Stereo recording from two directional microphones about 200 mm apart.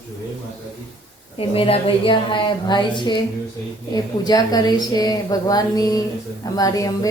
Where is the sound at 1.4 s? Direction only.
30° left (ahead or behind).